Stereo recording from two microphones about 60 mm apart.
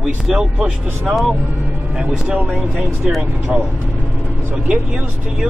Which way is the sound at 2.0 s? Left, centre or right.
Centre.